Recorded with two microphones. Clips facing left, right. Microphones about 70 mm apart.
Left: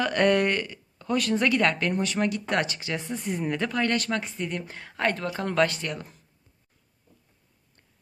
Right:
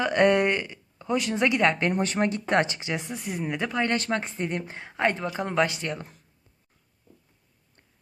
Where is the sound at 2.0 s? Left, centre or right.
Right.